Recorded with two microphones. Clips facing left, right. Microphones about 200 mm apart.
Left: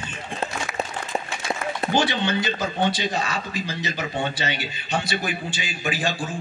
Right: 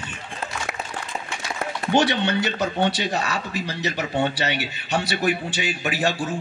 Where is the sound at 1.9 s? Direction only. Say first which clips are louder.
Right 3 dB; 65° right (ahead or behind).